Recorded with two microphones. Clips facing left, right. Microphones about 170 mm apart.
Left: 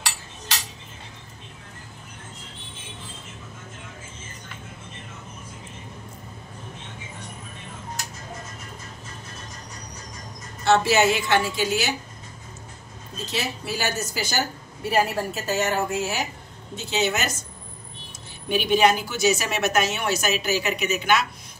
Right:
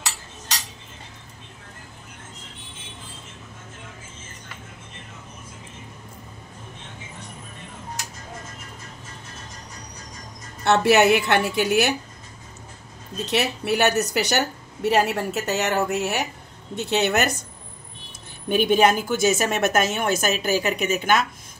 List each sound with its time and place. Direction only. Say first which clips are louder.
10.6 s a woman's voice: right 2 dB; 60° right (ahead or behind)
13.2 s a woman's voice: right 6 dB; 70° right (ahead or behind)
18.5 s a woman's voice: right 2 dB; 50° right (ahead or behind)